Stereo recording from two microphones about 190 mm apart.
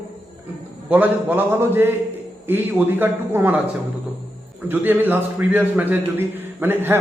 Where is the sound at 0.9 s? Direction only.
10° right (ahead or behind).